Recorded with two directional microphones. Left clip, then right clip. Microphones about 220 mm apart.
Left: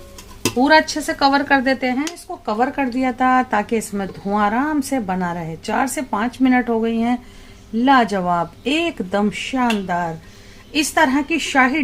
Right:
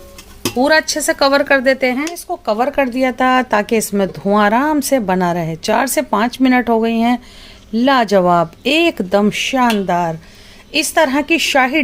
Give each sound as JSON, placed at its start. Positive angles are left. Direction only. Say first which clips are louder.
{"t": 0.6, "sound": "speech", "louder": "right 1 dB", "side_deg": -35}